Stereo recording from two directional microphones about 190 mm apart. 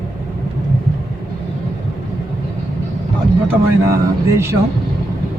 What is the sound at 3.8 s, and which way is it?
Speech, 15° right (ahead or behind).